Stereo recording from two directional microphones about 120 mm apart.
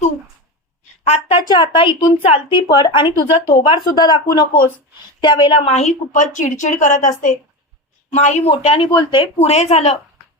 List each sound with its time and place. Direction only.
1.0 s speech: 60° left (ahead or behind)
1.4 s a woman's voice: 40° left (ahead or behind); by 7.3 s 90° left
8.1 s speech: 75° left (ahead or behind); by 8.9 s 55° left (ahead or behind)
8.9 s a woman's voice: 40° left (ahead or behind)
9.5 s speech: 65° left (ahead or behind)